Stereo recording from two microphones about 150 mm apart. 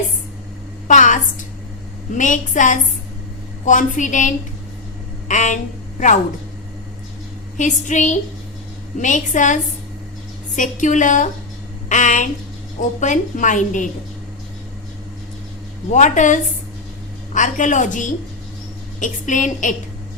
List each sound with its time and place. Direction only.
0.9 s a sound: 55° left (ahead or behind)
2.1 s a woman's voice: 55° left (ahead or behind)
7.5 s a woman's voice: 55° left (ahead or behind)
15.9 s a woman's voice: 55° left (ahead or behind)